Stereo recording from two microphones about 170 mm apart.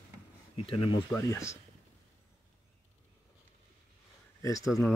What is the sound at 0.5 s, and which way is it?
Speech, 30° left (ahead or behind).